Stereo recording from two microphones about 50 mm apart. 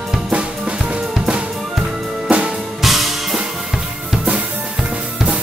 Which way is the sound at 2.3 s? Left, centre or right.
Right.